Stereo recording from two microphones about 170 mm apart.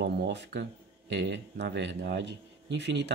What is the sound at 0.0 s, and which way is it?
Speech, 80° right.